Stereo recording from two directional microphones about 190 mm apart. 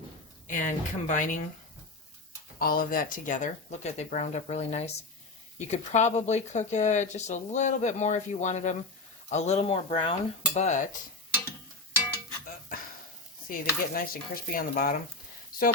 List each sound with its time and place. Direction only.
0.4 s stir: 45° left (ahead or behind)
2.6 s speech: 50° left (ahead or behind)
13.5 s stir: 50° left (ahead or behind)